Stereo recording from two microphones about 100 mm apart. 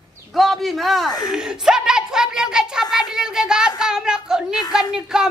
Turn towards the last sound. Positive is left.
turn(degrees=-5)  # may be behind; listen again after turning